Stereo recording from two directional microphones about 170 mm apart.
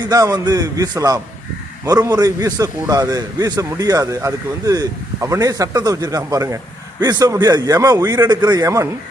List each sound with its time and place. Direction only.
0.0 s a man's voice: 20° right (ahead or behind)